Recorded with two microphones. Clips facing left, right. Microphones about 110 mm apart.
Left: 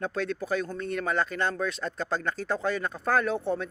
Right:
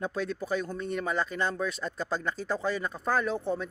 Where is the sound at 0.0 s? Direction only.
5° right (ahead or behind).